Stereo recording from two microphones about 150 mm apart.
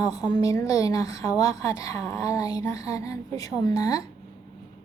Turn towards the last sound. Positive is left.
turn(degrees=20)  # may be behind; listen again after turning